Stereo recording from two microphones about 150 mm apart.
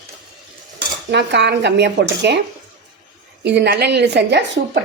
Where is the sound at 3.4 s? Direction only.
90° right.